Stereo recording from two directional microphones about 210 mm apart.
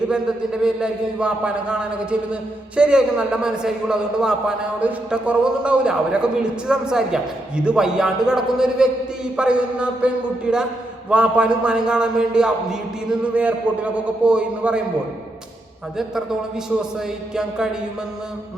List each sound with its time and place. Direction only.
0.1 s a man's voice: 5° right (ahead or behind)
16.0 s a man's voice: centre (ahead or behind)